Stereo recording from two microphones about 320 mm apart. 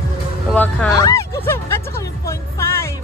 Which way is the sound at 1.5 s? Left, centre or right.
Centre.